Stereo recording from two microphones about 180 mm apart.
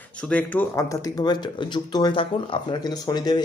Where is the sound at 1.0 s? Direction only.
25° left (ahead or behind).